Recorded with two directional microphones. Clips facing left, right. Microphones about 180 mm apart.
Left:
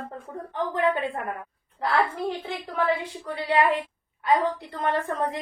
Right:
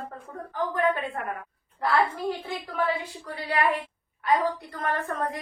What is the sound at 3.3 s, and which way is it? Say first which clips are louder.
A woman's voice: left 4 dB; 25° left (ahead or behind).